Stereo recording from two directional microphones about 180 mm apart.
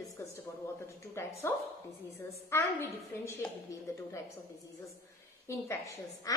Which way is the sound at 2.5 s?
15° left (ahead or behind).